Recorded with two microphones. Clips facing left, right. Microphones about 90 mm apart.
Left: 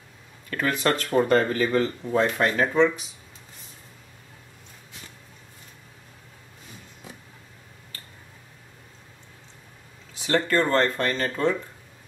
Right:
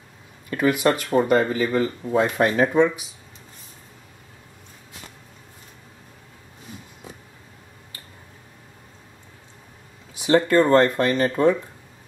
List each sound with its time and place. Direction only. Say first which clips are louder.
0.5 s speech: right 4 dB; 15° right (ahead or behind)
2.3 s speech: right 3 dB; 20° right (ahead or behind)
10.1 s speech: right 6 dB; 15° right (ahead or behind)